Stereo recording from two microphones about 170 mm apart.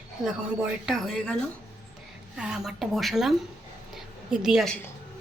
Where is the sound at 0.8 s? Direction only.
Centre (ahead or behind).